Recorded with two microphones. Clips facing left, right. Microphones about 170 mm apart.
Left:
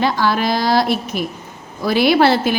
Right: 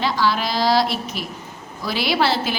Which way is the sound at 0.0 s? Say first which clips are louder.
Left 4 dB; 50° left (ahead or behind).